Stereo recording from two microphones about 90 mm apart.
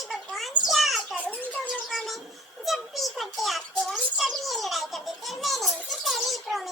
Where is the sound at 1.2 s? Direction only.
15° left (ahead or behind).